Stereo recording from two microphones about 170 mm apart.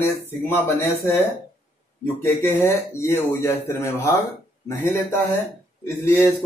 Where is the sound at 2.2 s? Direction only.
15° left (ahead or behind).